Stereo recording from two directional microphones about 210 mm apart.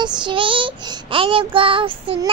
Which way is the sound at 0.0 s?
25° right (ahead or behind).